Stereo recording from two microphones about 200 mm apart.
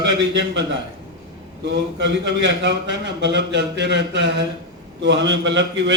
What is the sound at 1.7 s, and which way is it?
A man's voice, 60° right (ahead or behind).